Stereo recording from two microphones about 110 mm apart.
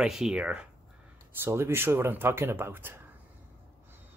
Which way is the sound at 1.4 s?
20° right (ahead or behind).